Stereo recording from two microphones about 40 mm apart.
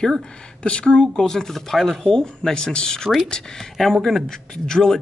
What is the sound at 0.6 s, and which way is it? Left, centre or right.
Speech, left.